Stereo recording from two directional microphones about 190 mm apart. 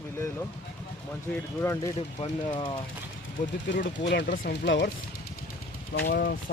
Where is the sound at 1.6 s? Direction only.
15° left (ahead or behind).